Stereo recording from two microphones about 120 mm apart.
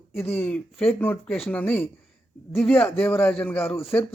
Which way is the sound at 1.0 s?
10° left (ahead or behind).